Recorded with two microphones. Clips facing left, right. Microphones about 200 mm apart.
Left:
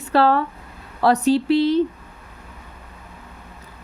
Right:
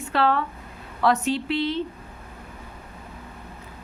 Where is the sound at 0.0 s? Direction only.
35° left (ahead or behind).